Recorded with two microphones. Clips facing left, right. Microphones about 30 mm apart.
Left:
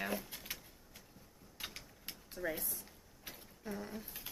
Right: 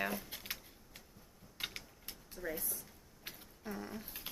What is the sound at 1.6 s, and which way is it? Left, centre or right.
Mechanisms, right.